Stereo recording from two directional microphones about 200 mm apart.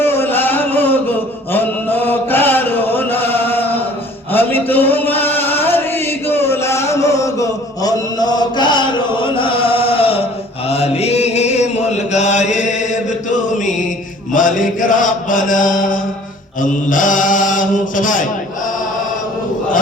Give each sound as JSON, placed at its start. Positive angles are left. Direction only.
{"t": 0.0, "sound": "a sound", "side_deg": 10}
{"t": 1.5, "sound": "chant", "side_deg": 10}
{"t": 4.3, "sound": "a sound", "side_deg": 10}
{"t": 10.7, "sound": "chant", "side_deg": 30}
{"t": 14.3, "sound": "mantra", "side_deg": 40}
{"t": 16.9, "sound": "chant", "side_deg": 40}